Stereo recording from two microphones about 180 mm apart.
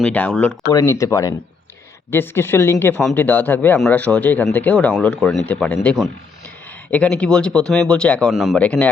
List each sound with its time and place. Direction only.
0.0 s speech: 5° left (ahead or behind)
0.7 s speech: 15° left (ahead or behind)